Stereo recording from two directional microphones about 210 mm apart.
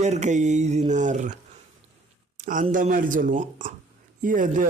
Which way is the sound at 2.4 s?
40° right (ahead or behind).